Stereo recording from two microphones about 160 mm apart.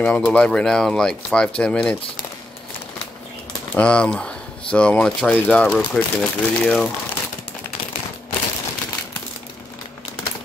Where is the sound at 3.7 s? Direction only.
5° left (ahead or behind).